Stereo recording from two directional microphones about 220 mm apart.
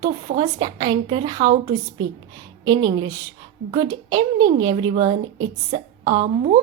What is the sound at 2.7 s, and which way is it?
A woman's voice, 20° right (ahead or behind).